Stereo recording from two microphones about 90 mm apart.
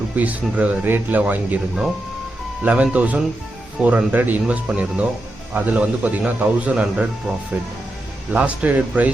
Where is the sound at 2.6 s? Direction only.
15° right (ahead or behind).